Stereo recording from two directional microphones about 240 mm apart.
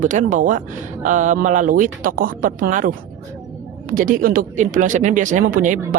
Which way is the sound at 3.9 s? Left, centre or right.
Right.